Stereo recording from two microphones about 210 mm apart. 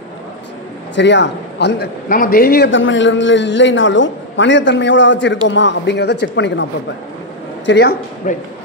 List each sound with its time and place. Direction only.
0.9 s a man's voice: 55° left (ahead or behind)
8.3 s speech: 35° left (ahead or behind)